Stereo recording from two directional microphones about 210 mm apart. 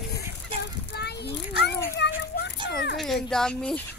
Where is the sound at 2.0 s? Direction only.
55° left (ahead or behind).